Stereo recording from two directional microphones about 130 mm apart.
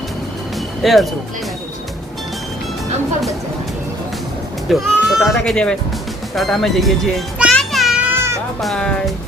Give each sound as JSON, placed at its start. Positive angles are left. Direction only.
{"t": 0.8, "sound": "speech", "side_deg": 0}
{"t": 4.7, "sound": "speech", "side_deg": 0}
{"t": 6.3, "sound": "music", "side_deg": 0}
{"t": 8.1, "sound": "cat", "side_deg": -20}
{"t": 8.6, "sound": "speech", "side_deg": 5}